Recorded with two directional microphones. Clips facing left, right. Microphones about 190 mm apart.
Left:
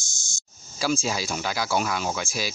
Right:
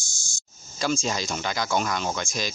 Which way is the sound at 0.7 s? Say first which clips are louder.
Even; 5° left (ahead or behind).